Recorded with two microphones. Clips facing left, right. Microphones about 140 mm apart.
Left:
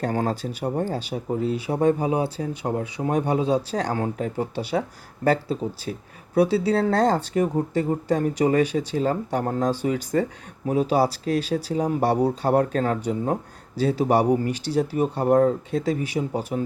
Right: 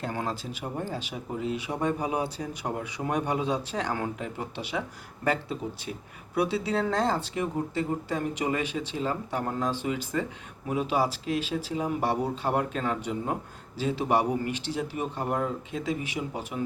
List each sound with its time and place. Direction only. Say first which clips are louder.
0.0 s speech: left 7 dB; 45° left (ahead or behind)